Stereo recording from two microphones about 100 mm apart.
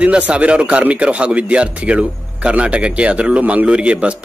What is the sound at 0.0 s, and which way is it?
Speech, 10° right (ahead or behind).